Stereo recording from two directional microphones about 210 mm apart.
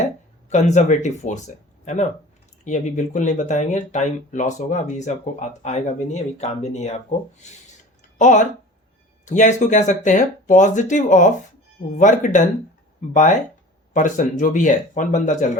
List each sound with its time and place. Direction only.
0.5 s speech: 35° left (ahead or behind)
8.2 s speech: 35° left (ahead or behind)
13.9 s speech: 35° left (ahead or behind)